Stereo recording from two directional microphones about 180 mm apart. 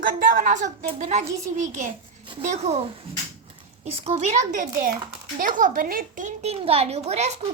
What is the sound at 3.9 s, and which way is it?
A woman's voice, 35° right (ahead or behind).